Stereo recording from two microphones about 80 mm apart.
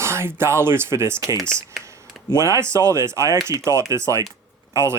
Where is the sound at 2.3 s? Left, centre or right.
Right.